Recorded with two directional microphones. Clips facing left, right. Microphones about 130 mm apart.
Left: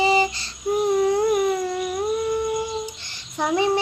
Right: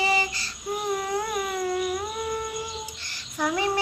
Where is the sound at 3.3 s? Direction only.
25° left (ahead or behind).